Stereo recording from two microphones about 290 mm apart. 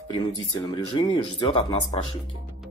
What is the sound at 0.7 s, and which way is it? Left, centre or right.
Speech, centre.